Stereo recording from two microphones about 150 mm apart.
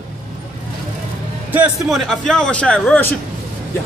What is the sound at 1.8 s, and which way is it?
A man's voice, centre (ahead or behind).